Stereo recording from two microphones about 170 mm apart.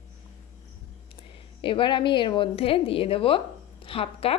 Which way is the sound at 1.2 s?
30° left (ahead or behind).